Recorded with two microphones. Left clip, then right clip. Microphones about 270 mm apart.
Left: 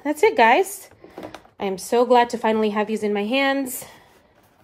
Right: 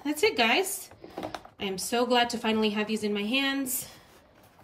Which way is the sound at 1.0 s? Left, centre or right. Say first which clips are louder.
Even; centre.